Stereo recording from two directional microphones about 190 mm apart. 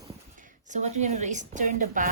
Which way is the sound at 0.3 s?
40° right (ahead or behind).